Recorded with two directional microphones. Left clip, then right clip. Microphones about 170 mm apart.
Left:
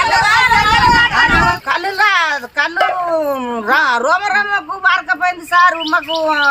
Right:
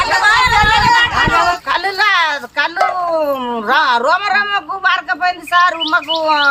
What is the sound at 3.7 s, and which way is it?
A woman's voice, 10° right (ahead or behind).